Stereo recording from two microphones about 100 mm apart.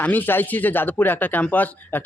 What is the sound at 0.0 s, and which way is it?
Speech, 15° left (ahead or behind).